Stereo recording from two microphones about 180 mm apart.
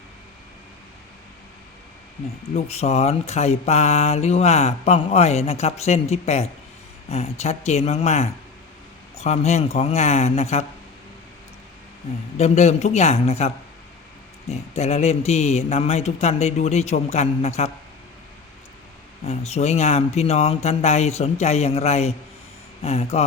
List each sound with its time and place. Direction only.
2.6 s mantra: 35° left (ahead or behind)
12.4 s mantra: 40° left (ahead or behind)
19.2 s mantra: 35° left (ahead or behind)